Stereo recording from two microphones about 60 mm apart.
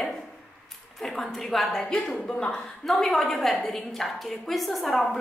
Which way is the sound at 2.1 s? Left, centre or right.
Centre.